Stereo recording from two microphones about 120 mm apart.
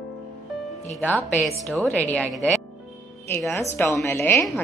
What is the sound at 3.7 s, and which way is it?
Speech, 20° left (ahead or behind).